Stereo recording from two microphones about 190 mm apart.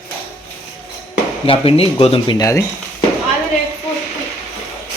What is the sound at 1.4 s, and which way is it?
Speech, 30° left (ahead or behind).